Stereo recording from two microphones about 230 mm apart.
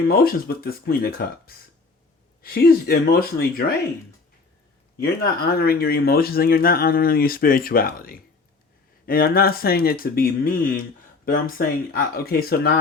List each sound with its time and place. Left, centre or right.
0.1 s speech: left
5.2 s speech: left